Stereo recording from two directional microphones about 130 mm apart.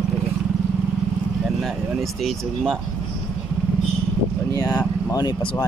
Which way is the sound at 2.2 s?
5° left (ahead or behind).